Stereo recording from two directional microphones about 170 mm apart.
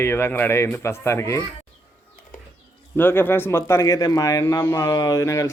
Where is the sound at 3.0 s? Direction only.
15° left (ahead or behind).